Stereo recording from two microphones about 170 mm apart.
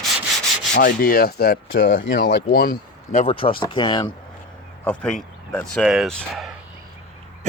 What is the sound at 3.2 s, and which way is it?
Speech, 30° left (ahead or behind).